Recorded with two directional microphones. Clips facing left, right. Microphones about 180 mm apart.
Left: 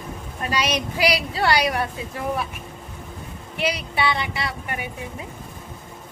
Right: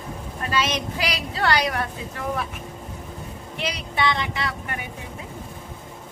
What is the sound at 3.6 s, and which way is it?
A woman's voice, 10° left (ahead or behind).